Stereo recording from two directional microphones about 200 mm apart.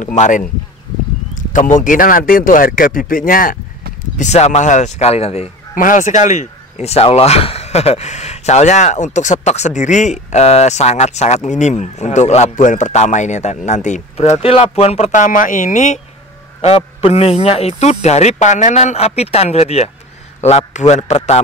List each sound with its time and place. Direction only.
0.0 s a man's voice: 35° left (ahead or behind)